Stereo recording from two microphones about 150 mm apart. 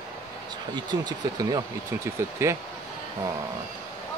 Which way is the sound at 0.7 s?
30° right (ahead or behind).